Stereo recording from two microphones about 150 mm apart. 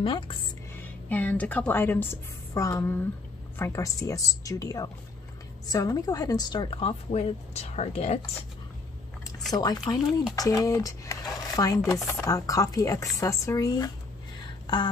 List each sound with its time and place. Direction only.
0.0 s a woman's voice: 35° left (ahead or behind)
0.7 s a woman's voice: 10° left (ahead or behind); by 8.2 s 45° left (ahead or behind)
9.5 s speech: 25° left (ahead or behind)